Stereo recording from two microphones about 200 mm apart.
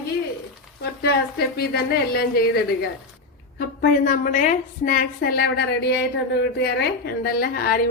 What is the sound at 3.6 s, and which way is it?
A woman's voice, 45° left (ahead or behind).